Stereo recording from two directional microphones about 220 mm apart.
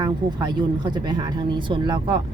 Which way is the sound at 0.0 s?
20° right (ahead or behind).